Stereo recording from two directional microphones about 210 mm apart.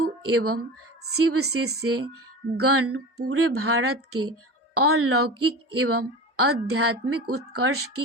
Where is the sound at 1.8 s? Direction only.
90° right.